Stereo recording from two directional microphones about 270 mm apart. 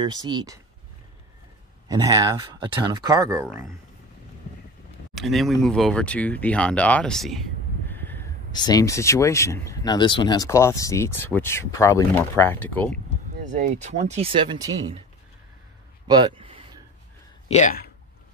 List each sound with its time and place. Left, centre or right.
0.0 s speech: centre
1.9 s speech: centre
5.1 s speech: centre
13.4 s speech: right
16.1 s a sound: centre
17.5 s speech: left